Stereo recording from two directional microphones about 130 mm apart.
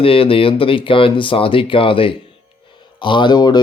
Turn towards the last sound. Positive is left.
turn(degrees=35)  # may be behind; listen again after turning